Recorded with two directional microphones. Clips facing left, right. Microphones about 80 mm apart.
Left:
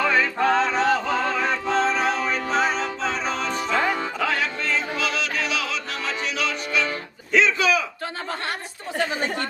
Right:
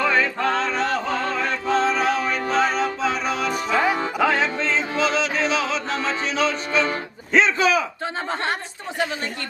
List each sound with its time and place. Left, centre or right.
0.0 s music: centre
4.2 s music: right
7.3 s a sound: right